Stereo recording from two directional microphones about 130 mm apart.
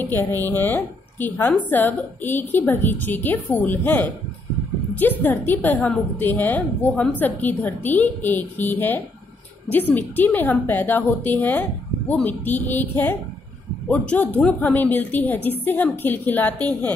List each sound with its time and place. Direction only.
0.0 s a woman's voice: 15° left (ahead or behind)
0.4 s speech: 30° right (ahead or behind)
0.7 s a woman's voice: 15° left (ahead or behind)